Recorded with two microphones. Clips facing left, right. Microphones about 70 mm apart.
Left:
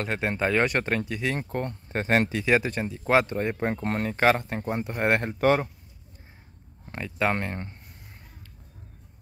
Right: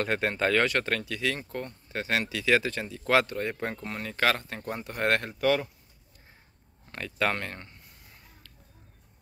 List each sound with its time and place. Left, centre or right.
0.0 s speech: centre; by 1.4 s left
1.4 s speech: left
2.4 s speech: left
3.8 s speech: left
4.1 s speech: left
5.4 s speech: left
6.9 s speech: centre